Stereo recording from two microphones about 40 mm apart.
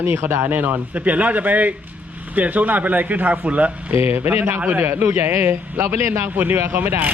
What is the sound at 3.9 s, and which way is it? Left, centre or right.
Speech, right.